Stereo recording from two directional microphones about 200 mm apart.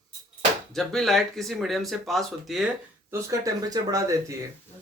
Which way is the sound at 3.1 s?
15° right (ahead or behind).